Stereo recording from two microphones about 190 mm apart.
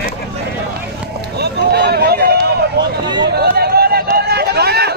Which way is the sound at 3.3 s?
55° right (ahead or behind).